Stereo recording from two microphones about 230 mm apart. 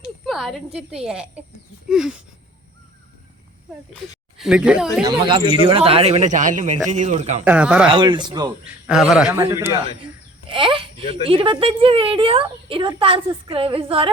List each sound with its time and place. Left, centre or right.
0.0 s a woman's voice: centre
4.4 s speech: centre
5.0 s a woman's voice: right
7.4 s a man's voice: centre
7.9 s a woman's voice: right
8.6 s a man's voice: centre
10.5 s a woman's voice: right